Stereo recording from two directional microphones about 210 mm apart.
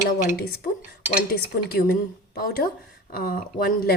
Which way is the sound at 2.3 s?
45° left (ahead or behind).